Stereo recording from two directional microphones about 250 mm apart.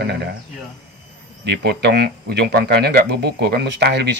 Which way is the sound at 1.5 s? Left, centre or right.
Right.